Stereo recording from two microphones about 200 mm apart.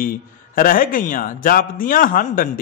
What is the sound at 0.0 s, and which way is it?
A man's voice, 45° left (ahead or behind).